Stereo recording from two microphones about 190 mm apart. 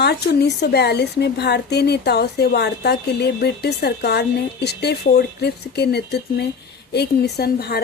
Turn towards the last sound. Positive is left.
turn(degrees=55)  # may be behind; listen again after turning